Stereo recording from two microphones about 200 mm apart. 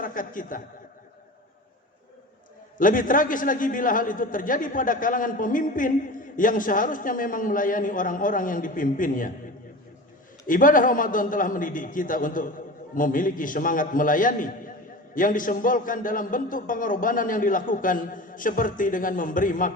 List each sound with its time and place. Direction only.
0.0 s a man's voice: 45° left (ahead or behind)
2.7 s a man's voice: 40° left (ahead or behind)
10.4 s a man's voice: 45° left (ahead or behind)